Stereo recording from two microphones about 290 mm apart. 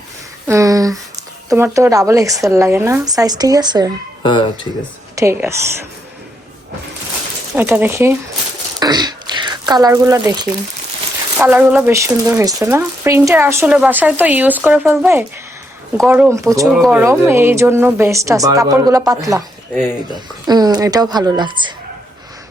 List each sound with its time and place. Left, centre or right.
0.4 s a sound: centre
1.5 s speech: centre
4.2 s speech: centre
5.1 s speech: centre
7.5 s speech: centre
8.8 s a sound: centre
11.3 s speech: centre